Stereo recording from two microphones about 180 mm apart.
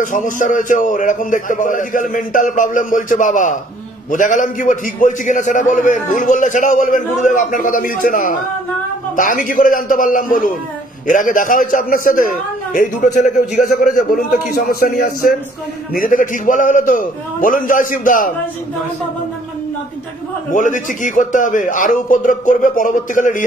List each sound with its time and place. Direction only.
0.0 s a man's voice: 45° left (ahead or behind)
20.5 s a man's voice: 45° left (ahead or behind)